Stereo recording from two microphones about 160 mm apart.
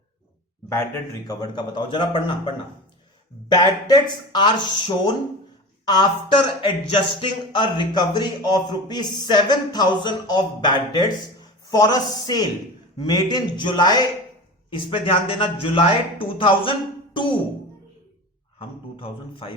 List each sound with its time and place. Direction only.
1.3 s speech: 25° left (ahead or behind)
3.5 s speech: 25° left (ahead or behind)
18.9 s speech: 35° left (ahead or behind)